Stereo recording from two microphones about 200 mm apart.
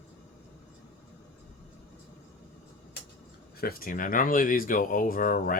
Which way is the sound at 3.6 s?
50° left (ahead or behind).